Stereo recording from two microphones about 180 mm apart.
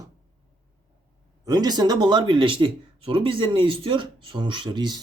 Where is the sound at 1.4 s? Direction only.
20° right (ahead or behind).